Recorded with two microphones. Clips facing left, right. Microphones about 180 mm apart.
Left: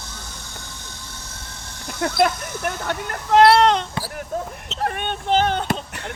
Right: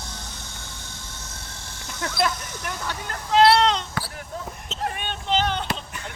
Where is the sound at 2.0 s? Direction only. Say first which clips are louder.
Left 6 dB; 55° left (ahead or behind).